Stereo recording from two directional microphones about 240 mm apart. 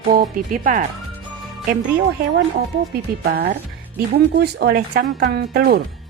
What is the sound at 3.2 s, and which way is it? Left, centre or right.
A woman's voice, right.